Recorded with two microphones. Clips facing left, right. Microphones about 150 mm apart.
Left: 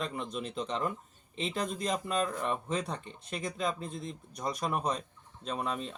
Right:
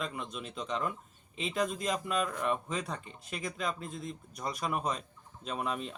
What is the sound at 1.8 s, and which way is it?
Speech, 30° left (ahead or behind).